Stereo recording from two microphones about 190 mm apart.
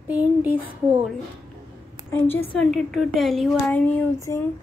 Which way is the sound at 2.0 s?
10° left (ahead or behind).